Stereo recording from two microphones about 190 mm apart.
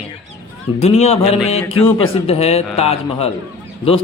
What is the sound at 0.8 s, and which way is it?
A man's voice, 35° left (ahead or behind).